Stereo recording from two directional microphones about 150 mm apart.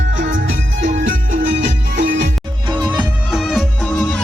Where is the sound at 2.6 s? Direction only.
30° right (ahead or behind).